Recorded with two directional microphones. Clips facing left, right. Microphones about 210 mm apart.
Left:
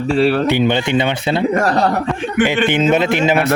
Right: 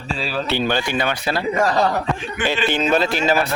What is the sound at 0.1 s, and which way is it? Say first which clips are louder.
Speech: left 11 dB; 65° left (ahead or behind).